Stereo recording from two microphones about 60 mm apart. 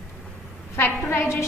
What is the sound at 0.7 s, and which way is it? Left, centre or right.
Speech, left.